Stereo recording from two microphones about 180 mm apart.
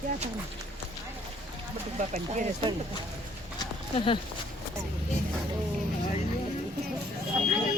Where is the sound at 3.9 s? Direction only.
30° left (ahead or behind).